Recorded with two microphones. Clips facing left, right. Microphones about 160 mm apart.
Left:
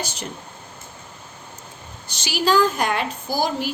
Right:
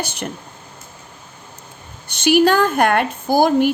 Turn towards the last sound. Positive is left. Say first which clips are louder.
# right 9 dB
turn(degrees=-55)  # may be behind; listen again after turning